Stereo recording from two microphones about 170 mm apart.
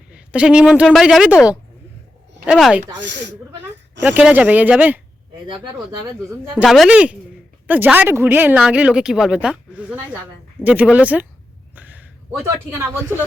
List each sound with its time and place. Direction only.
0.1 s speech: 5° right (ahead or behind)
2.4 s speech: 5° right (ahead or behind)
3.0 s speech: 90° right
4.0 s speech: 10° right (ahead or behind)
6.5 s speech: 5° right (ahead or behind)
11.7 s a sound: 10° right (ahead or behind)